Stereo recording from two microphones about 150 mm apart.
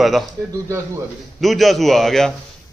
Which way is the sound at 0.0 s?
Centre (ahead or behind).